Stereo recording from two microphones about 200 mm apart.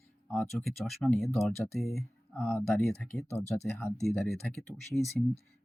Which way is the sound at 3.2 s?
35° left (ahead or behind).